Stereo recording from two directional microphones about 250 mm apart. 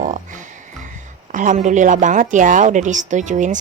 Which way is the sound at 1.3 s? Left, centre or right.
Right.